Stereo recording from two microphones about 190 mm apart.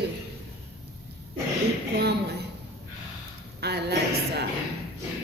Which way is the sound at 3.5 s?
60° right (ahead or behind).